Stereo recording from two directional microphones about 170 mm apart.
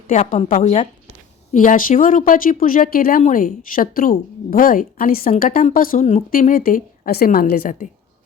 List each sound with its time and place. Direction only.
0.1 s a woman's voice: 40° left (ahead or behind)